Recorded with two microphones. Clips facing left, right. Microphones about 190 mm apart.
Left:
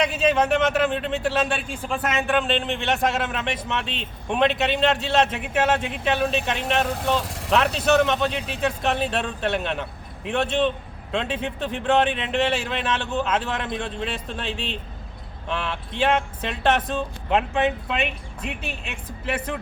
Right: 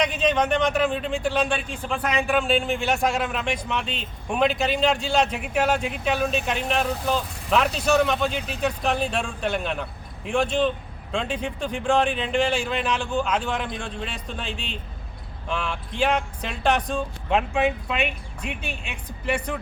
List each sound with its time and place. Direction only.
0.0 s speech: 5° left (ahead or behind)
7.2 s speech: 85° left
7.5 s speech: centre (ahead or behind)